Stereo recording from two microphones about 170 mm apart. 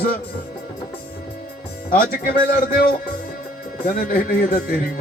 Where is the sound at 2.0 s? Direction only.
55° left (ahead or behind).